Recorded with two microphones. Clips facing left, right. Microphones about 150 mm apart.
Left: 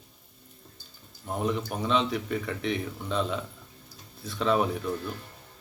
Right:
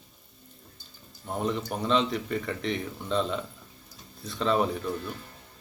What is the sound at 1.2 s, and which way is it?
Speech, centre (ahead or behind).